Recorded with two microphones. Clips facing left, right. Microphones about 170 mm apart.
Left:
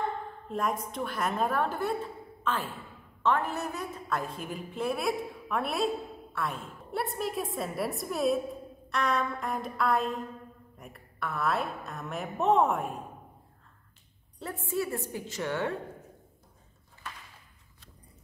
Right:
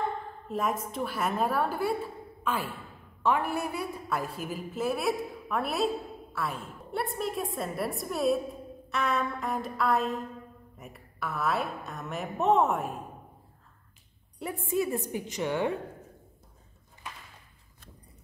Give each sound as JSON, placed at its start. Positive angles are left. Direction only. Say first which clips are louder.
{"t": 0.5, "sound": "a woman's voice", "louder": "right 1 dB", "side_deg": -5}
{"t": 14.4, "sound": "a woman's voice", "louder": "right 3 dB", "side_deg": -15}